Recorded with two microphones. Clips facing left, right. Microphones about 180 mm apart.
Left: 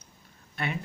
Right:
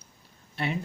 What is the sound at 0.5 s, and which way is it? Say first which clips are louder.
Speech: right 2 dB; 30° right (ahead or behind).